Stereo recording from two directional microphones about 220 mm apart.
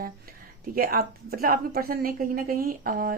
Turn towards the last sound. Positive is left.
turn(degrees=-40)  # may be behind; listen again after turning